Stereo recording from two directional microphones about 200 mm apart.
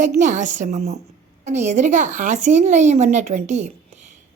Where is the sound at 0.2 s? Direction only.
40° right (ahead or behind).